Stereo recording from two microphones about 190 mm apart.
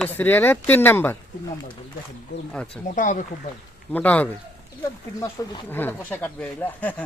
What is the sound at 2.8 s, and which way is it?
Speech, 45° left (ahead or behind).